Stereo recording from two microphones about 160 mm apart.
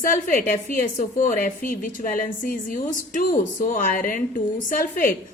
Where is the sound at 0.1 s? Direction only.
55° left (ahead or behind).